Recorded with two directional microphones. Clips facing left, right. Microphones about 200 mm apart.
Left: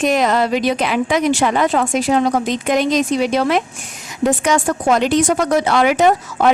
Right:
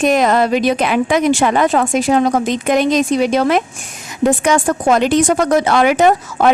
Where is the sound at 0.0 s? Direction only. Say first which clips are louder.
Right 3 dB; 50° right (ahead or behind).